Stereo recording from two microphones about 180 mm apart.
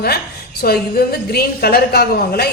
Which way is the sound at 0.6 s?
60° left (ahead or behind).